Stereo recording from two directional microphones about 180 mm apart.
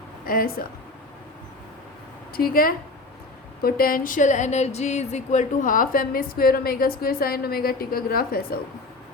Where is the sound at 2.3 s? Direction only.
55° left (ahead or behind).